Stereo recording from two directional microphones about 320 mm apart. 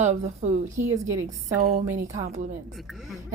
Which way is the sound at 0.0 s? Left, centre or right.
Right.